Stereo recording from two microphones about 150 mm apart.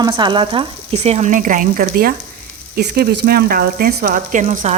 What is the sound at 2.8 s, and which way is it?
Speech, 90° right.